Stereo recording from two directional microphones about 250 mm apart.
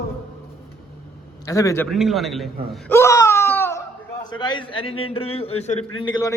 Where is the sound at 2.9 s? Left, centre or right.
Centre.